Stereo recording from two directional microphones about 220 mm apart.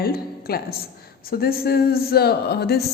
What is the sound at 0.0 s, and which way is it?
A woman's voice, 45° left (ahead or behind).